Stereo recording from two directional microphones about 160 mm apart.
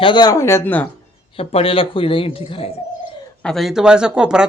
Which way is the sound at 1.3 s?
35° left (ahead or behind).